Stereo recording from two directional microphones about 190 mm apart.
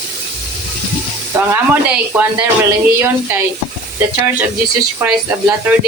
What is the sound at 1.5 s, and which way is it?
Speech, 10° right (ahead or behind).